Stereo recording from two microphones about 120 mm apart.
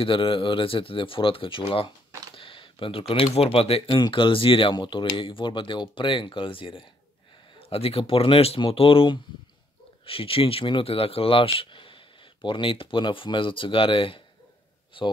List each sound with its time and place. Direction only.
0.0 s speech: 45° left (ahead or behind)
2.3 s a sound: 45° left (ahead or behind)
3.3 s speech: 55° left (ahead or behind)
3.9 s speech: 40° left (ahead or behind)